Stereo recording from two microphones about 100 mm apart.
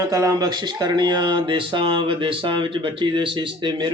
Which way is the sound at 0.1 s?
35° right (ahead or behind).